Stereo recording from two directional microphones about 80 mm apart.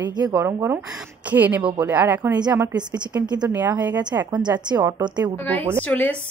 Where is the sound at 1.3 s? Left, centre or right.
Right.